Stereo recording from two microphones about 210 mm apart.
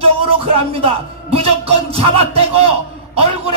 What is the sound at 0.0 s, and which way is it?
A man's voice, 25° right (ahead or behind).